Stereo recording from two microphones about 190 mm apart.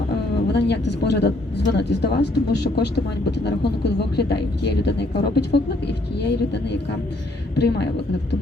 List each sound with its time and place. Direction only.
0.5 s speech: 60° left (ahead or behind)